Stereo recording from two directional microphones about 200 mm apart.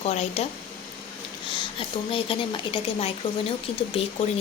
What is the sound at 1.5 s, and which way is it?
A woman's voice, 25° left (ahead or behind).